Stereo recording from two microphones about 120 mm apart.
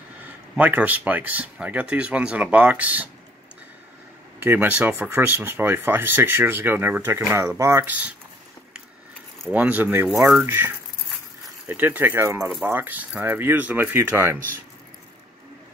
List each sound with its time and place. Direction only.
0.2 s speech: 15° right (ahead or behind)
4.4 s speech: 15° right (ahead or behind)
9.5 s speech: 10° right (ahead or behind)